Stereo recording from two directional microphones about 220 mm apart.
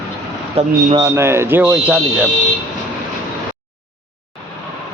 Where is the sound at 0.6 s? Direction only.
30° right (ahead or behind).